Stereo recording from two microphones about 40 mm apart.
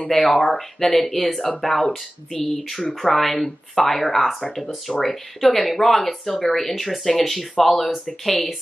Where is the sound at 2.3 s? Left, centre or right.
Left.